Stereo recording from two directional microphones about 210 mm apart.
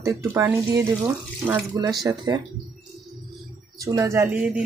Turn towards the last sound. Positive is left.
turn(degrees=-5)  # may be behind; listen again after turning